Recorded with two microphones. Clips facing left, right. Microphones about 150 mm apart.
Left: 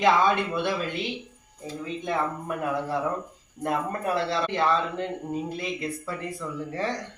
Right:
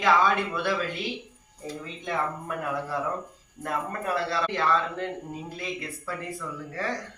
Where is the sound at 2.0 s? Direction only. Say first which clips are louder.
Left 1 dB; 15° left (ahead or behind).